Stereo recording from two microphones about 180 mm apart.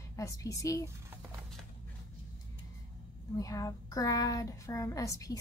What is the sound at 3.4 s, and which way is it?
Speech, 20° left (ahead or behind).